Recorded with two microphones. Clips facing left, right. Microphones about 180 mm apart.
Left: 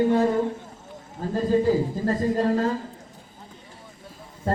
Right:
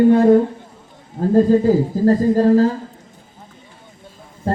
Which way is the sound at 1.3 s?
45° right (ahead or behind).